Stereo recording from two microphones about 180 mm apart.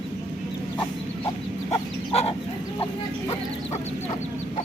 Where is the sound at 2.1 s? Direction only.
35° left (ahead or behind).